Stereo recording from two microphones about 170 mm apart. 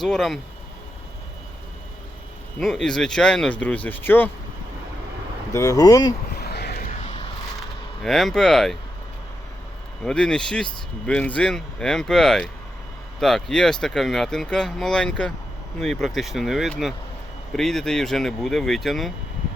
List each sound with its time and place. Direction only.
0.0 s speech: centre (ahead or behind)
2.6 s speech: centre (ahead or behind)
5.5 s speech: 20° left (ahead or behind)
6.3 s a sound: 70° left (ahead or behind)
6.8 s vehicle: 35° left (ahead or behind)
8.0 s speech: centre (ahead or behind)
10.0 s speech: 5° left (ahead or behind)